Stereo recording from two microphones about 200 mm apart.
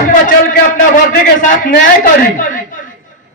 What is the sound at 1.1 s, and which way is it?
Speech, 40° left (ahead or behind).